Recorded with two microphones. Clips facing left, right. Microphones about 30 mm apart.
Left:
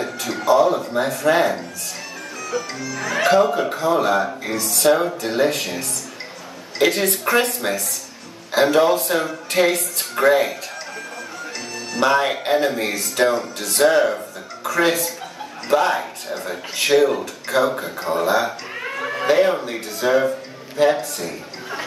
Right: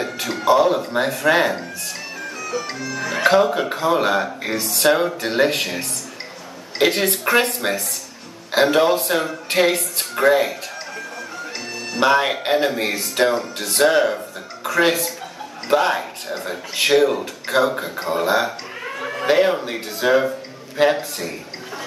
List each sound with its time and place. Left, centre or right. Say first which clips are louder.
0.0 s a sound: right 2 dB; centre
0.9 s speech: even; centre
6.8 s speech: even; centre
9.8 s speech: even; centre
11.9 s speech: right 1 dB; centre
18.9 s a sound: left 2 dB; centre
19.2 s a man's voice: even; centre
20.8 s speech: even; right